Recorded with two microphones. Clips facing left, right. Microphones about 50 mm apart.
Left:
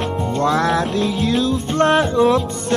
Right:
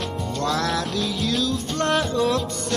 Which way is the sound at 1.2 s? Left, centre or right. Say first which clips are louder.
Left 5 dB; left.